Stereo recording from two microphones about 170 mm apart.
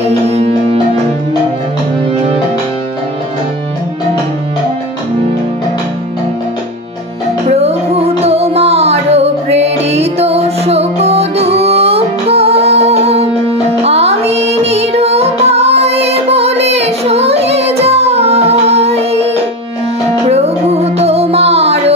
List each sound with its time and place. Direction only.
0.0 s music: 40° right (ahead or behind)
7.4 s music: 40° right (ahead or behind)